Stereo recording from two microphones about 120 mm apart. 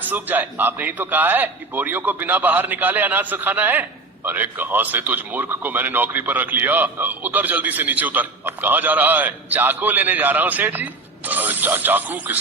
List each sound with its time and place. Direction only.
0.0 s a man's voice: 15° right (ahead or behind)